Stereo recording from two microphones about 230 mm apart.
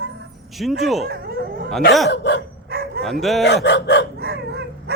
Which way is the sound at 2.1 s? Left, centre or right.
Left.